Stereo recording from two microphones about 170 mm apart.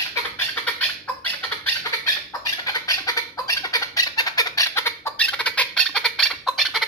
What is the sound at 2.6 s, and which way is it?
Chicken, 20° left (ahead or behind).